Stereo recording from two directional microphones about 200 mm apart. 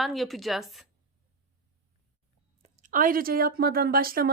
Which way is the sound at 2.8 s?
40° right (ahead or behind).